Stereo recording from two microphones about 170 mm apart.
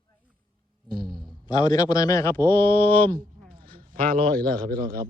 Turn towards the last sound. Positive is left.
turn(degrees=-60)  # may be behind; listen again after turning